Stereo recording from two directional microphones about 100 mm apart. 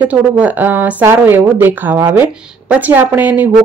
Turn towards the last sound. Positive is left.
turn(degrees=-20)  # may be behind; listen again after turning